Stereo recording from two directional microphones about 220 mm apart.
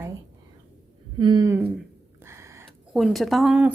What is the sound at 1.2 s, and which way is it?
Speech, 20° right (ahead or behind).